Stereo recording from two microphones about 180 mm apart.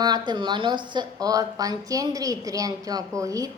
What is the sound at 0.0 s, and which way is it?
A woman's voice, 25° right (ahead or behind).